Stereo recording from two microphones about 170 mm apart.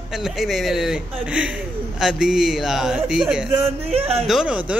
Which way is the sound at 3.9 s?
35° right (ahead or behind).